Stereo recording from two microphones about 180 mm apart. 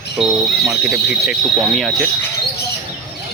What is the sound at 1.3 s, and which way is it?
Speech, centre (ahead or behind).